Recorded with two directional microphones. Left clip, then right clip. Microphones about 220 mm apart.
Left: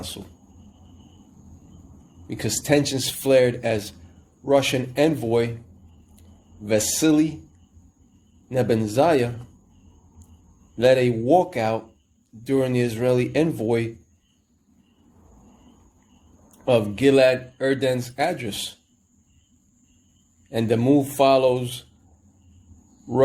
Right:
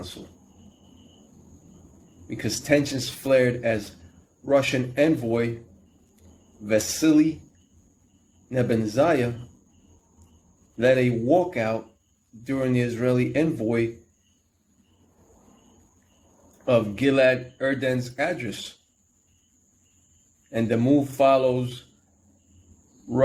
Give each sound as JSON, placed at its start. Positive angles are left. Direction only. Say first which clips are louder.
{"t": 2.2, "sound": "a man's voice", "louder": "left 2 dB", "side_deg": 35}
{"t": 6.7, "sound": "a man's voice", "louder": "left 1 dB", "side_deg": 35}
{"t": 8.4, "sound": "a man's voice", "louder": "left 3 dB", "side_deg": 40}
{"t": 10.8, "sound": "a man's voice", "louder": "left 3 dB", "side_deg": 40}
{"t": 16.6, "sound": "a man's voice", "louder": "left 3 dB", "side_deg": 35}
{"t": 20.5, "sound": "a man's voice", "louder": "left 2 dB", "side_deg": 40}